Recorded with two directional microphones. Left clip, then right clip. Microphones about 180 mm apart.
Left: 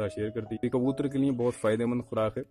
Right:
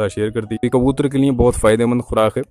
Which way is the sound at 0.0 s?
30° right (ahead or behind).